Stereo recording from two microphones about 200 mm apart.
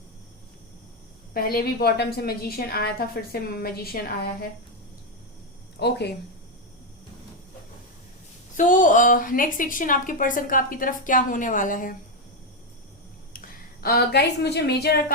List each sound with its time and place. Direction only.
1.3 s a woman's voice: 50° left (ahead or behind)
5.8 s speech: 55° left (ahead or behind)
8.5 s a woman's voice: 40° left (ahead or behind)
13.3 s a woman's voice: 45° left (ahead or behind)